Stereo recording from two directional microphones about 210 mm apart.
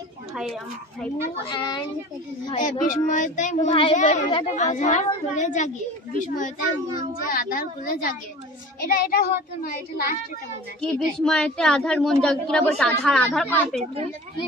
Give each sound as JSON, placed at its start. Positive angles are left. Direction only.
{"t": 0.3, "sound": "speech", "side_deg": -5}
{"t": 1.4, "sound": "a child's voice", "side_deg": 20}
{"t": 2.6, "sound": "a woman's voice", "side_deg": 40}
{"t": 3.7, "sound": "a child's voice", "side_deg": 25}
{"t": 10.8, "sound": "a woman's voice", "side_deg": 5}